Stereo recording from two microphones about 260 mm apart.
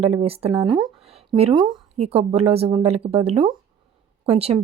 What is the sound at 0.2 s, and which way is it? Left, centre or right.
Speech, right.